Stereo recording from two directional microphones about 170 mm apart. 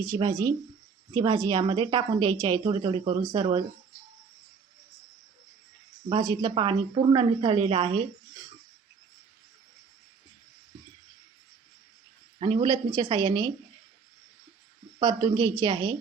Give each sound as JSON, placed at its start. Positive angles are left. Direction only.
{"t": 0.0, "sound": "a woman's voice", "side_deg": -25}
{"t": 6.1, "sound": "a woman's voice", "side_deg": -25}
{"t": 12.4, "sound": "a woman's voice", "side_deg": -25}
{"t": 14.9, "sound": "a woman's voice", "side_deg": -35}